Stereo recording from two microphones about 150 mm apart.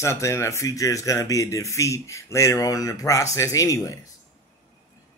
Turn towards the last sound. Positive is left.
turn(degrees=20)  # may be behind; listen again after turning